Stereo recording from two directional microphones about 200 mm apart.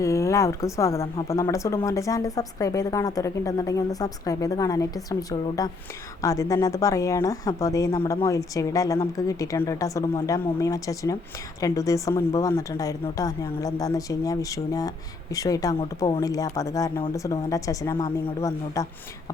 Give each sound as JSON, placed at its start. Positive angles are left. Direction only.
{"t": 0.0, "sound": "speech", "side_deg": 15}